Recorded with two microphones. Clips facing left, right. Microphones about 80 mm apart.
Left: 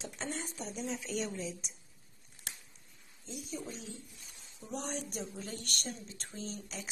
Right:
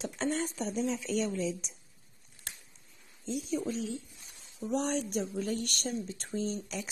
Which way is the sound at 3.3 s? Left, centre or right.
Right.